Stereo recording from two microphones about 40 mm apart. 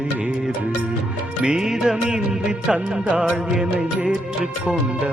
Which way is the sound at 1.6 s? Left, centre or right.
Centre.